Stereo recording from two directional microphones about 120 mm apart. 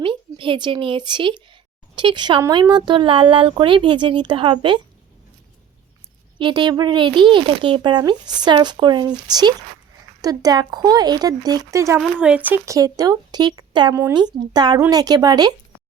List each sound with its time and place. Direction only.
0.0 s a child's voice: 45° right (ahead or behind)
6.4 s a child's voice: 40° right (ahead or behind); by 11.9 s 25° right (ahead or behind)
11.9 s speech: 10° right (ahead or behind)
12.6 s a child's voice: 30° right (ahead or behind)